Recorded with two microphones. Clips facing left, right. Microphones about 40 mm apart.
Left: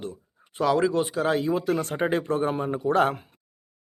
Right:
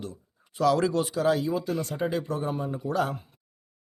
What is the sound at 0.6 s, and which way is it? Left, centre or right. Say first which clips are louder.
Speech: left 1 dB; left.